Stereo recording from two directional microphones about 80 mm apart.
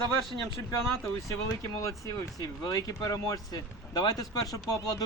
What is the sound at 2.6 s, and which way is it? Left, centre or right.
A man's voice, left.